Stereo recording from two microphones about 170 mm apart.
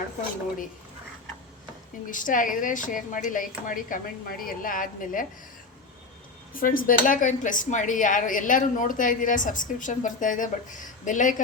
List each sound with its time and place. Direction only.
2.0 s speech: 50° left (ahead or behind)
6.5 s speech: 55° left (ahead or behind)